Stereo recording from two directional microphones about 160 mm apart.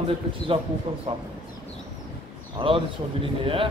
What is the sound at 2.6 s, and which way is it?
A man's voice, 35° right (ahead or behind).